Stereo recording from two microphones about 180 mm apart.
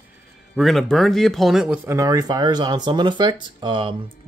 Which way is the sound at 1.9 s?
20° right (ahead or behind).